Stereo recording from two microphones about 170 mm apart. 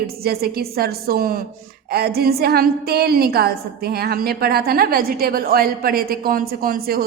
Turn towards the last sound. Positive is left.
turn(degrees=-60)  # may be behind; listen again after turning